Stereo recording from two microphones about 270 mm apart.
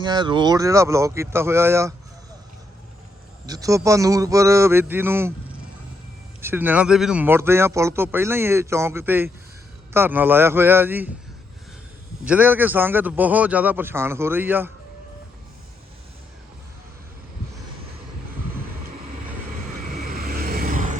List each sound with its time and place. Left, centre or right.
0.0 s speech: centre
3.4 s speech: centre
6.4 s speech: centre
12.2 s speech: centre
19.9 s vehicle: right